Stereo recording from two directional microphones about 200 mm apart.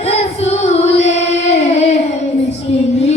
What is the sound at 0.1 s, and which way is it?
Female singing, 30° left (ahead or behind).